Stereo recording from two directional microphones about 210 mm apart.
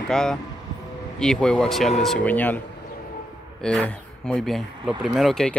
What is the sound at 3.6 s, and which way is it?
Speech, 5° left (ahead or behind).